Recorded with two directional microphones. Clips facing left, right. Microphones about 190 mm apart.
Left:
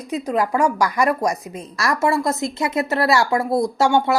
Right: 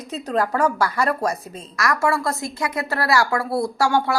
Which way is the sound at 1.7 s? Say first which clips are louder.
Left 2 dB; 25° left (ahead or behind).